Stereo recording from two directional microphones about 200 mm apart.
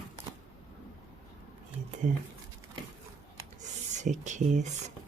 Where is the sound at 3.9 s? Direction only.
35° right (ahead or behind).